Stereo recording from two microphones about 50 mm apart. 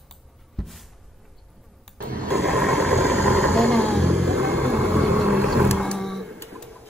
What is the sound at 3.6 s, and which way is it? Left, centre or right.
Vehicle, left.